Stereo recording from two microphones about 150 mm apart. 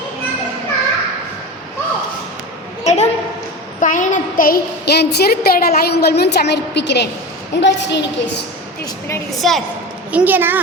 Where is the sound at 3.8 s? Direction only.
60° left (ahead or behind); by 7.1 s 90° left.